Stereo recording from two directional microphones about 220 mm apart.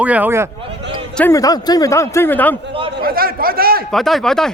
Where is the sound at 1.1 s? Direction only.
10° left (ahead or behind).